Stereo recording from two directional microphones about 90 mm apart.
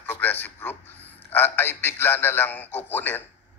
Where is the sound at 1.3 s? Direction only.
20° left (ahead or behind).